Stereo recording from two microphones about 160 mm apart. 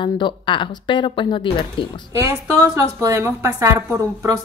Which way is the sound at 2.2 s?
20° right (ahead or behind).